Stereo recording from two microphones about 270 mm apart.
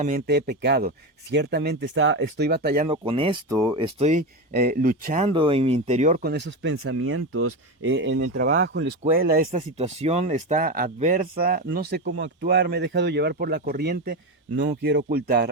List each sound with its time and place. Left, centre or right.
0.0 s speech: right
2.9 s speech: centre
5.3 s speech: centre; by 9.5 s right
9.5 s speech: right